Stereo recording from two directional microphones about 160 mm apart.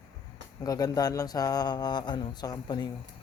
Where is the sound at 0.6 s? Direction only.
25° left (ahead or behind).